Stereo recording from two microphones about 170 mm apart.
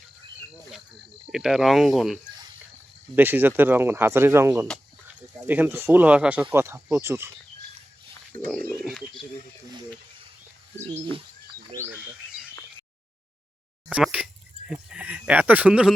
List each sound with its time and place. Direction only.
1.3 s speech: 5° right (ahead or behind)
3.2 s speech: 10° right (ahead or behind)
8.8 s a sound: centre (ahead or behind)
10.9 s speech: 30° right (ahead or behind)
11.7 s speech: 15° right (ahead or behind)
13.9 s speech: 5° right (ahead or behind)